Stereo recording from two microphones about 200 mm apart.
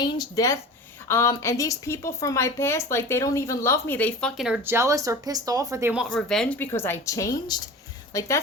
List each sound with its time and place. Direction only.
0.0 s a woman's voice: 20° left (ahead or behind)